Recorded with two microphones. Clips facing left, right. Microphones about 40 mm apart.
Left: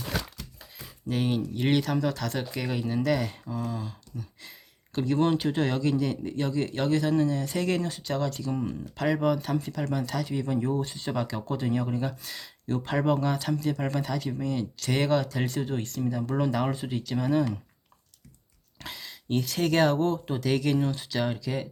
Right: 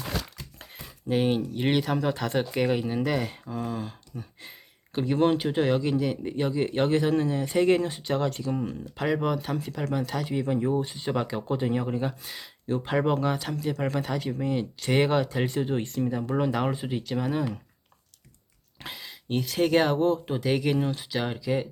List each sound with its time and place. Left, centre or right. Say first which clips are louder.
1.0 s speech: right 3 dB; right
3.5 s speech: right 1 dB; right
4.9 s speech: right 1 dB; centre
8.4 s speech: right 1 dB; centre
18.8 s speech: right 1 dB; centre